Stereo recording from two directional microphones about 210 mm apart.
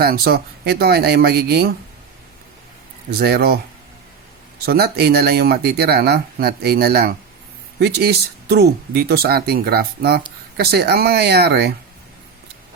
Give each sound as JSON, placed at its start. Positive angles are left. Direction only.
{"t": 0.0, "sound": "speech", "side_deg": -45}
{"t": 3.1, "sound": "speech", "side_deg": -50}
{"t": 4.6, "sound": "speech", "side_deg": -50}